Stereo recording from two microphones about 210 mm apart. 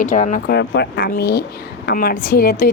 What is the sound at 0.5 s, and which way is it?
A woman's voice, 55° left (ahead or behind).